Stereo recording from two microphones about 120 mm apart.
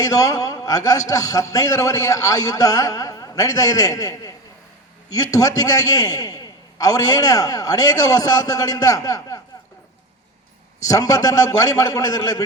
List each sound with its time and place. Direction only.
0.0 s a man's voice: 30° left (ahead or behind)
10.8 s a man's voice: 30° left (ahead or behind)